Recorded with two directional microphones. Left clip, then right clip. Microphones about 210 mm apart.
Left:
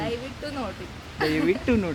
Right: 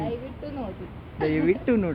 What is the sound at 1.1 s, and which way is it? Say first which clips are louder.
Speech: even; 20° left (ahead or behind).